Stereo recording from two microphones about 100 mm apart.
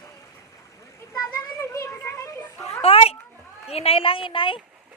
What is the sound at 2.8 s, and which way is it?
A woman's voice, 85° left.